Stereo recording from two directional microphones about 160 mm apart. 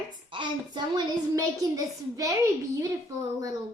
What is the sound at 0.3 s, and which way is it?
A woman's voice, 30° right (ahead or behind).